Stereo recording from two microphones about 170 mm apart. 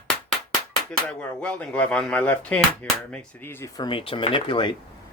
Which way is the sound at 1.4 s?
10° left (ahead or behind).